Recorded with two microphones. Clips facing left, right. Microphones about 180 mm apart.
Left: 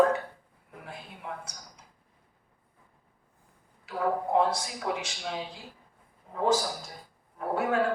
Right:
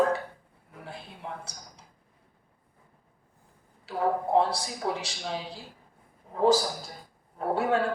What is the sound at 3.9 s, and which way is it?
Speech, 30° right (ahead or behind).